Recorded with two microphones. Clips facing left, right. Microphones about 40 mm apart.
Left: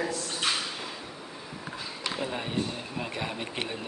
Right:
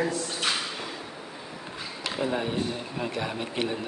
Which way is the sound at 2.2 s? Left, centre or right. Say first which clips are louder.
Right 5 dB; centre.